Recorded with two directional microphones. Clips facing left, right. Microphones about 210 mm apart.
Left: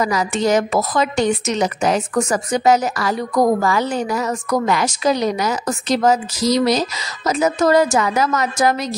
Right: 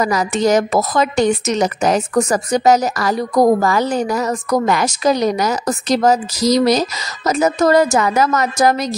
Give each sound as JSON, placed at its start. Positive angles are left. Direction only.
{"t": 0.0, "sound": "a woman's voice", "side_deg": -45}